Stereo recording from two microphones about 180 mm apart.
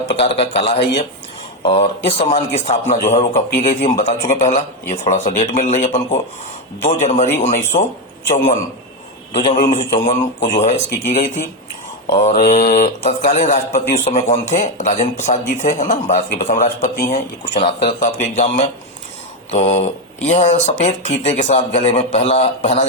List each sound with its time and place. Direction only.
0.1 s a man's voice: 35° left (ahead or behind)
2.1 s a man's voice: 30° left (ahead or behind)
3.3 s a man's voice: 50° left (ahead or behind)
12.4 s a man's voice: 50° left (ahead or behind)
17.1 s a man's voice: 30° left (ahead or behind)
17.8 s a man's voice: 45° left (ahead or behind)